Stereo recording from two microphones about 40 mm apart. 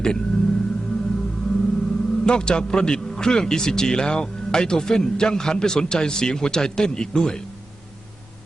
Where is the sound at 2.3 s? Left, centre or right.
Left.